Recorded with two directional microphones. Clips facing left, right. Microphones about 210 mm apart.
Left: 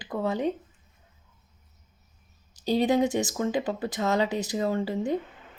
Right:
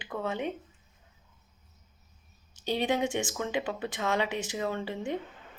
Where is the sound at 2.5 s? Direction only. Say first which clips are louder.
Left 6 dB; 35° left (ahead or behind).